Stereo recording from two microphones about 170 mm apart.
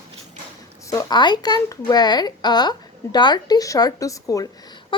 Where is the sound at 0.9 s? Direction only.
20° left (ahead or behind).